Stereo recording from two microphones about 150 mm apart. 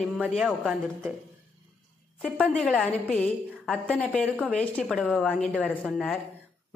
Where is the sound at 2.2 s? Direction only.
5° left (ahead or behind).